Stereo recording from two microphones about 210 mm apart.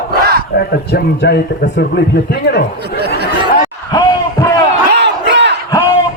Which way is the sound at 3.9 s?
20° left (ahead or behind).